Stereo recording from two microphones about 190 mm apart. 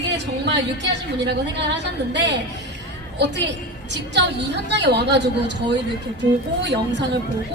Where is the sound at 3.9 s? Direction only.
65° right (ahead or behind).